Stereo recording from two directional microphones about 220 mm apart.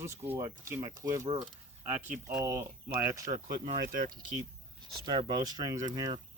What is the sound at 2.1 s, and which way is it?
Speech, 5° right (ahead or behind).